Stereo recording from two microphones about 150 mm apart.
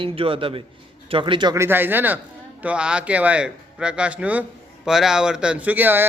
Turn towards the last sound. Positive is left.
turn(degrees=-15)  # may be behind; listen again after turning